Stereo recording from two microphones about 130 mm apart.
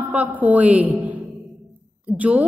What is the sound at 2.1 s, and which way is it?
Speech, 10° right (ahead or behind).